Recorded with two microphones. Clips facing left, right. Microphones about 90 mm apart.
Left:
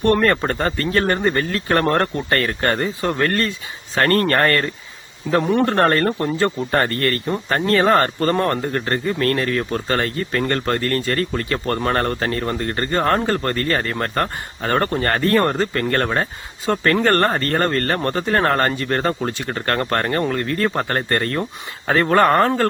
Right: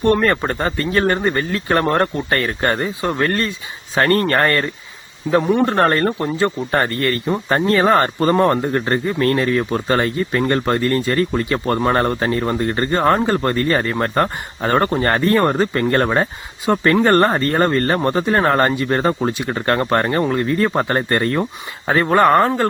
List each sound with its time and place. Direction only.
0.0 s speech: 20° right (ahead or behind)
5.4 s a man's voice: 5° right (ahead or behind)
5.6 s speech: 20° right (ahead or behind)